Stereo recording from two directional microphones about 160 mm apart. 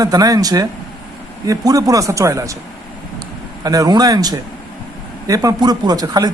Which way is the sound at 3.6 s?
25° right (ahead or behind).